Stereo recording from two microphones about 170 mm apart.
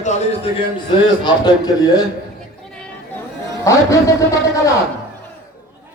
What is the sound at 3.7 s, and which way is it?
A man's voice, 15° left (ahead or behind).